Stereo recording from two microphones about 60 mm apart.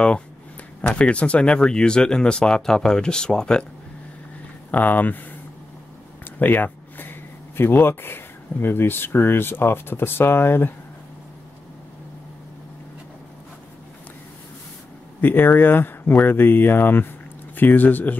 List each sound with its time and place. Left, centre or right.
0.9 s speech: centre
4.6 s speech: left
6.4 s speech: left
15.1 s speech: left